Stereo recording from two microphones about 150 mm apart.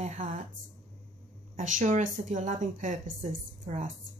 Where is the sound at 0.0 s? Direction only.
55° right (ahead or behind).